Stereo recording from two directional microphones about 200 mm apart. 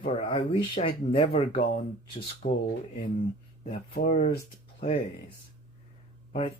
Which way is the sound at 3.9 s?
45° left (ahead or behind).